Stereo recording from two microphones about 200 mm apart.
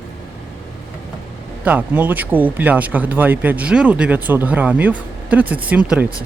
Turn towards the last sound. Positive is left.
turn(degrees=-5)  # may be behind; listen again after turning